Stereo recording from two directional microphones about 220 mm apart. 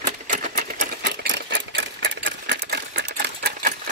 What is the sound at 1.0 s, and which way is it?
Sewing machine, 50° right (ahead or behind).